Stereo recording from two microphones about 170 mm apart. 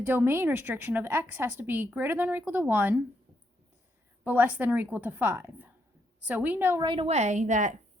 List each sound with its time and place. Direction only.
0.0 s a woman's voice: 10° right (ahead or behind)
4.2 s a woman's voice: 10° right (ahead or behind)
6.8 s a woman's voice: 30° right (ahead or behind); by 7.8 s 45° right (ahead or behind)